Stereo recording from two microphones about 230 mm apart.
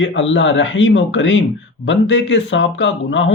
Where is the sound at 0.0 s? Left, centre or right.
Left.